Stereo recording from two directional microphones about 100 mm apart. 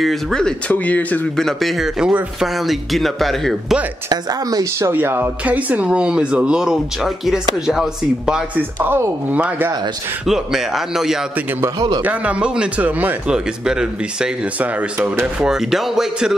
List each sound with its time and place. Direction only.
0.0 s speech: 5° left (ahead or behind)
1.3 s speech: centre (ahead or behind)
4.1 s speech: 40° right (ahead or behind)
4.8 s speech: 25° right (ahead or behind); by 8.5 s 5° right (ahead or behind)
8.7 s speech: 20° right (ahead or behind)
10.2 s speech: 5° right (ahead or behind)
12.0 s speech: 15° right (ahead or behind)
15.4 s speech: 5° right (ahead or behind)